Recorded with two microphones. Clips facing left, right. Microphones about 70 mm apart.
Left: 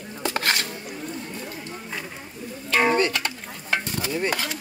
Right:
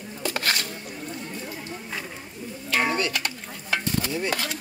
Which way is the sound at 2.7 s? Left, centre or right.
Left.